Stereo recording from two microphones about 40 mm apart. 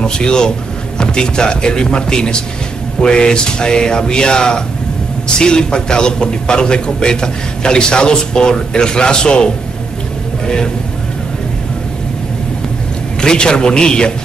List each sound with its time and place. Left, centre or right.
0.0 s a man's voice: left
13.2 s a man's voice: left